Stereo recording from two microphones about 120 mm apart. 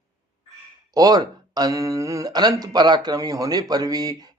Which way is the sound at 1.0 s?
35° right (ahead or behind).